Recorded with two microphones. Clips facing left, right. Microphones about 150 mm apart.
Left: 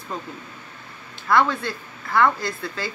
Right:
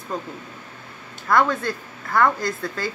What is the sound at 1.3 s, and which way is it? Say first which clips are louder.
Speech: right 1 dB; 45° right (ahead or behind).